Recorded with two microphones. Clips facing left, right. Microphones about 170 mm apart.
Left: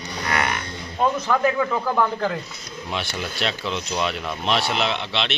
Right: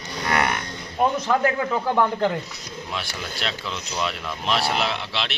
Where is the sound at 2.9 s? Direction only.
Centre (ahead or behind).